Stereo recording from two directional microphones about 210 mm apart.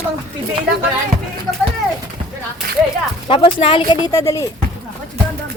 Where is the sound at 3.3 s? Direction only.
25° left (ahead or behind).